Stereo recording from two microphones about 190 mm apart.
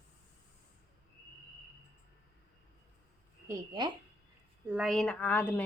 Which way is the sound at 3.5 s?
20° right (ahead or behind).